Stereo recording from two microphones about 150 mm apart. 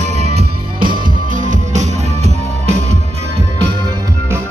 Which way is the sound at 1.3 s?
55° right (ahead or behind).